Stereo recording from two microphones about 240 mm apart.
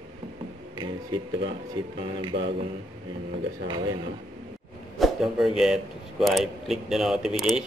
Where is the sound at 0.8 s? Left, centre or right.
Centre.